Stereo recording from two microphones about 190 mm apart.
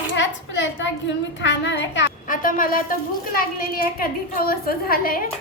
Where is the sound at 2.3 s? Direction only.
45° left (ahead or behind).